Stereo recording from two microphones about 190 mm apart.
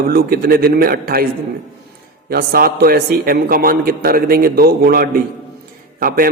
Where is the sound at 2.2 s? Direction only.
50° right (ahead or behind).